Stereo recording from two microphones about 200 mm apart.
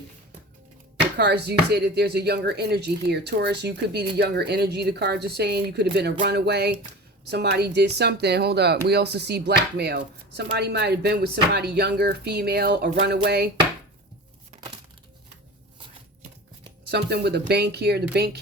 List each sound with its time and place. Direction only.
1.1 s speech: 55° right (ahead or behind)
16.8 s speech: 55° right (ahead or behind)